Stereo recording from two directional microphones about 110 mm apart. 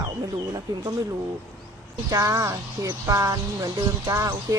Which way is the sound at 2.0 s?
30° right (ahead or behind).